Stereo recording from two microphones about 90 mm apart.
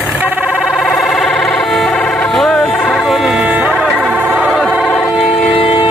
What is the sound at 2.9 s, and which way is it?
Music, centre (ahead or behind).